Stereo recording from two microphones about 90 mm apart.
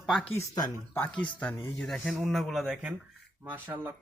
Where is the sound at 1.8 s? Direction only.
5° left (ahead or behind).